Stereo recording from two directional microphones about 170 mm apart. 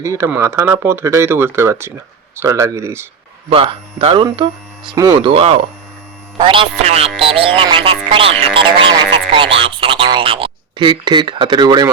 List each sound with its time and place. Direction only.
0.0 s speech: 15° right (ahead or behind)
3.5 s speech: 30° right (ahead or behind)